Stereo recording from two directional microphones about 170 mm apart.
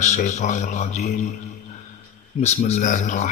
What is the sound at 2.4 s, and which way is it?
Speech, 40° left (ahead or behind).